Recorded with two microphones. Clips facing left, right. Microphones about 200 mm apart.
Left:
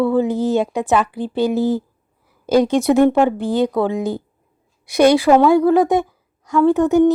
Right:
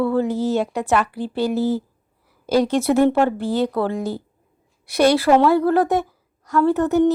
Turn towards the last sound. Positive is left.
turn(degrees=15)  # may be behind; listen again after turning